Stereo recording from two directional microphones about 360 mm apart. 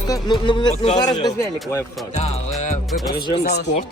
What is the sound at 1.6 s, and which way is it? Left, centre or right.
Speech, centre.